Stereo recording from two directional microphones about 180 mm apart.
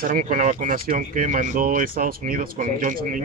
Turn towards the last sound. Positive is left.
turn(degrees=-45)  # may be behind; listen again after turning